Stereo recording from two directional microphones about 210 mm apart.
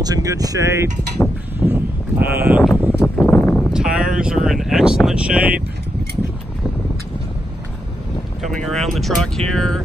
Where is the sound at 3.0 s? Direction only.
10° left (ahead or behind).